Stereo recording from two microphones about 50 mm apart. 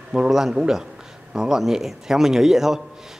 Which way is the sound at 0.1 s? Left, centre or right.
Centre.